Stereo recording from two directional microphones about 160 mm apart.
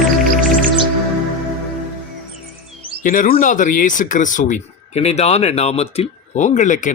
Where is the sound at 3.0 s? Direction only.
60° left (ahead or behind).